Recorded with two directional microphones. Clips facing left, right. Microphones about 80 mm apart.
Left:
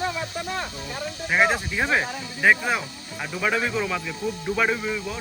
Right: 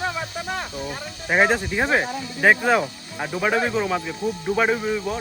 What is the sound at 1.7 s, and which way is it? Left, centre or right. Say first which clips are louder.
Speech: right 2 dB; right.